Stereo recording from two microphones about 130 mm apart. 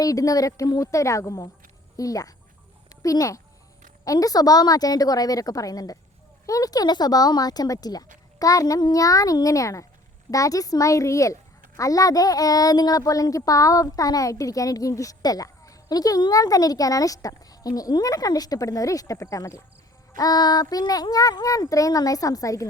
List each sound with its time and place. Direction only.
0.0 s speech: 25° left (ahead or behind)